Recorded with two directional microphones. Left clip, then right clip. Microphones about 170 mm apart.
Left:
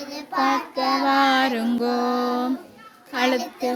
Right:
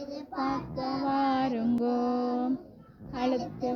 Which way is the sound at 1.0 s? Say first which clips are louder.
Left 8 dB; 35° left (ahead or behind).